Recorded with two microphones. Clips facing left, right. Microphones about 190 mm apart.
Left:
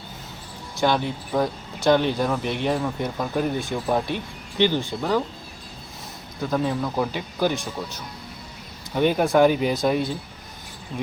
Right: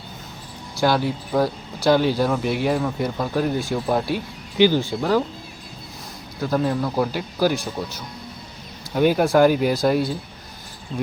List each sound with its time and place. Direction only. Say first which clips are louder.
0.8 s speech: right 2 dB; 5° right (ahead or behind)
6.4 s speech: right 2 dB; centre (ahead or behind)
9.0 s speech: right 2 dB; 5° right (ahead or behind)
10.9 s speech: right 3 dB; 20° right (ahead or behind)